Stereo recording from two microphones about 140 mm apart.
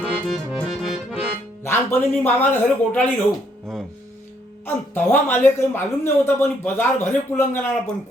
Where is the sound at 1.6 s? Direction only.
20° left (ahead or behind).